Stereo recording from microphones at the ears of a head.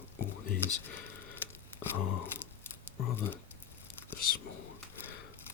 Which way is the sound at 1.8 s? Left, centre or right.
Left.